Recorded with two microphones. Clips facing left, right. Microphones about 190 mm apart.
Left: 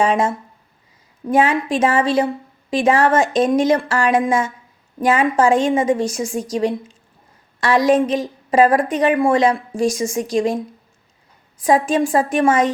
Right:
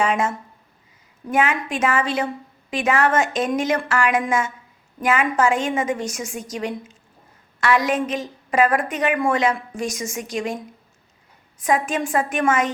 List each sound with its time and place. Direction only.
0.0 s a woman's voice: 35° left (ahead or behind)
11.6 s a woman's voice: 30° left (ahead or behind)